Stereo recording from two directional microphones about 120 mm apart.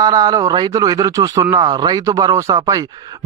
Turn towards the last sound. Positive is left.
turn(degrees=-30)  # may be behind; listen again after turning